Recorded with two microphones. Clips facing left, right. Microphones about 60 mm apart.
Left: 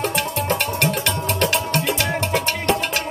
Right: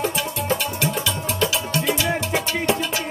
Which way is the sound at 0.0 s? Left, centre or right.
Left.